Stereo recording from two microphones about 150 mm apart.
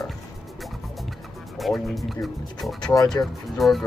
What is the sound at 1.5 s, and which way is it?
Speech, centre (ahead or behind).